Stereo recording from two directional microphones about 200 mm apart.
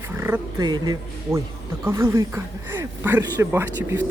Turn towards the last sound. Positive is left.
turn(degrees=-10)  # may be behind; listen again after turning